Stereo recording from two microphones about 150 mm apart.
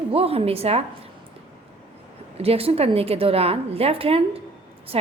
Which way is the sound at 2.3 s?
40° right (ahead or behind).